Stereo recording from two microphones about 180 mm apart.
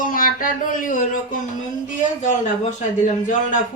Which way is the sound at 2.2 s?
45° left (ahead or behind).